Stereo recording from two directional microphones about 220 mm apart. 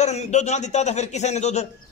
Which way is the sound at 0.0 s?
30° left (ahead or behind).